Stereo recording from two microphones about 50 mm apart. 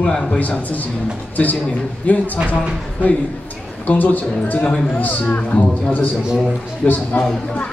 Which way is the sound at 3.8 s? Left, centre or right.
Left.